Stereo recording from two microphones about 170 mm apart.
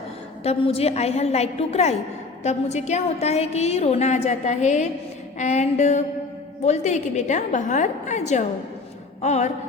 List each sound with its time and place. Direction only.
0.4 s a woman's voice: 35° left (ahead or behind)